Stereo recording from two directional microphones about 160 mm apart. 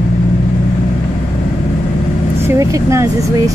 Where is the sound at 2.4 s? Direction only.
20° right (ahead or behind).